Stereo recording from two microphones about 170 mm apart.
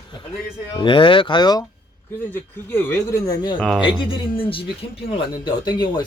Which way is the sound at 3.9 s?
30° left (ahead or behind).